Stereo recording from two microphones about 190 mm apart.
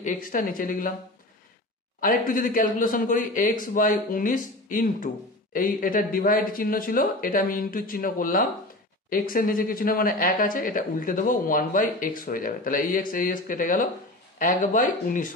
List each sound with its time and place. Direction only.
0.0 s a man's voice: 45° left (ahead or behind)
2.0 s a man's voice: 45° left (ahead or behind)